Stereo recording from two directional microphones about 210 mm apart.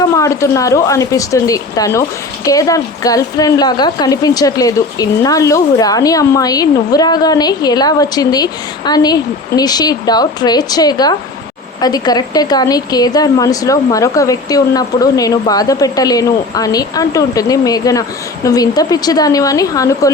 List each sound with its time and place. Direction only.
0.2 s speech: 15° left (ahead or behind)